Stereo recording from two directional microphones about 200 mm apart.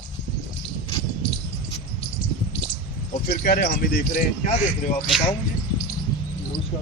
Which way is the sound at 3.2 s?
55° left (ahead or behind).